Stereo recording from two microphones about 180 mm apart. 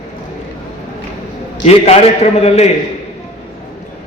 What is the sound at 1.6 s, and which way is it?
A man's voice, 35° left (ahead or behind).